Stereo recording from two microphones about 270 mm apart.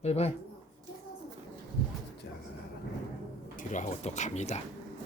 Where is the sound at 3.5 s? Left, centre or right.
Left.